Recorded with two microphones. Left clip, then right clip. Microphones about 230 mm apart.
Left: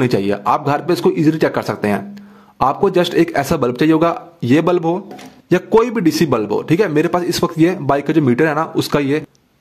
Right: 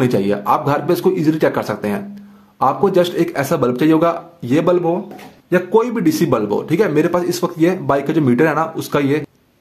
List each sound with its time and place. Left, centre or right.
0.0 s a man's voice: left